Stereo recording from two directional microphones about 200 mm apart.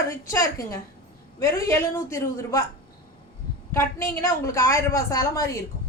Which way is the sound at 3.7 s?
15° left (ahead or behind).